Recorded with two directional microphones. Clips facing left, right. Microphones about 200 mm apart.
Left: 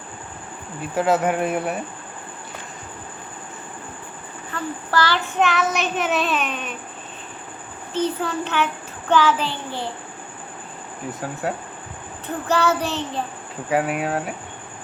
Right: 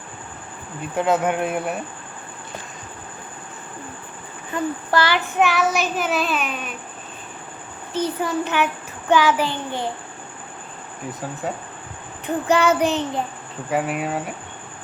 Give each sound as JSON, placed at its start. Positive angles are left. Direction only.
{"t": 0.9, "sound": "child singing", "side_deg": 5}
{"t": 4.5, "sound": "child singing", "side_deg": -15}
{"t": 7.9, "sound": "child singing", "side_deg": -10}
{"t": 11.4, "sound": "child singing", "side_deg": 5}
{"t": 12.2, "sound": "child singing", "side_deg": -15}
{"t": 13.7, "sound": "child singing", "side_deg": 0}